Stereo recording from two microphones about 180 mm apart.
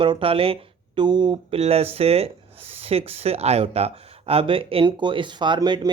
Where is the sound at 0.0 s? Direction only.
30° right (ahead or behind).